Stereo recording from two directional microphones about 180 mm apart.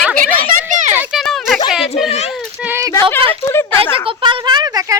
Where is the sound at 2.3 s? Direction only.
10° right (ahead or behind).